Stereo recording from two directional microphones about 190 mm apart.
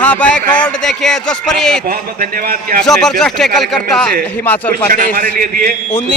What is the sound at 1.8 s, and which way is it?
Speech, 50° right (ahead or behind).